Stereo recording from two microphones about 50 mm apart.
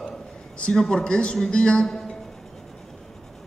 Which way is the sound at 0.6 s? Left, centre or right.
Centre.